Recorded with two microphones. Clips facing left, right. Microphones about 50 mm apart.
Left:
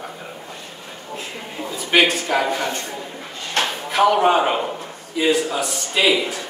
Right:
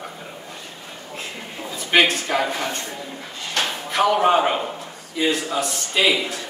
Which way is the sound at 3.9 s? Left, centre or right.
Centre.